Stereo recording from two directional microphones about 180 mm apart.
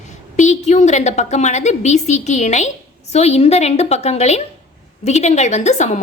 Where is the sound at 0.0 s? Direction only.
40° left (ahead or behind).